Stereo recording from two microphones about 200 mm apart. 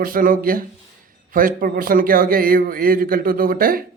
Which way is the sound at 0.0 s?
45° right (ahead or behind).